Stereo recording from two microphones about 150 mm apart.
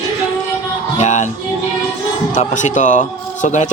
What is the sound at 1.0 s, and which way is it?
Speech, 50° left (ahead or behind).